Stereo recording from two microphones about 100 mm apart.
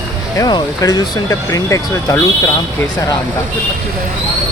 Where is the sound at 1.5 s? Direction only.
30° left (ahead or behind).